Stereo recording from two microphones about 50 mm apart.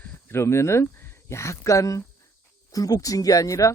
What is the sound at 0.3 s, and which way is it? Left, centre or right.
Speech, left.